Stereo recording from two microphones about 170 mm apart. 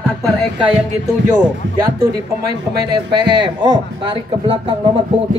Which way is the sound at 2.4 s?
75° right (ahead or behind).